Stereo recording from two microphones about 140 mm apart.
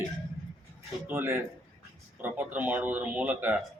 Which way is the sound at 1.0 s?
15° right (ahead or behind).